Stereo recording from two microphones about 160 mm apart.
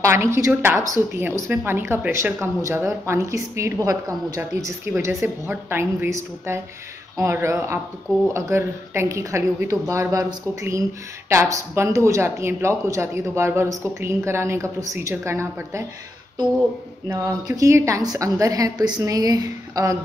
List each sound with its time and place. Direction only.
0.0 s a woman's voice: 15° right (ahead or behind)
17.1 s a woman's voice: 20° right (ahead or behind)